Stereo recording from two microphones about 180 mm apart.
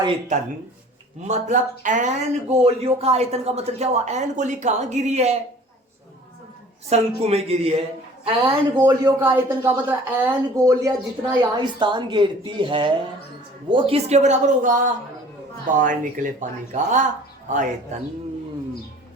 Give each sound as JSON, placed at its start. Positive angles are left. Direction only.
{"t": 1.3, "sound": "speech", "side_deg": -45}
{"t": 2.5, "sound": "speech", "side_deg": -35}
{"t": 6.9, "sound": "speech", "side_deg": -35}
{"t": 8.9, "sound": "a woman's voice", "side_deg": -15}